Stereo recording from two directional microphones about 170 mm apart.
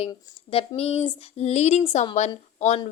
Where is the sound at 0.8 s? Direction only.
35° left (ahead or behind).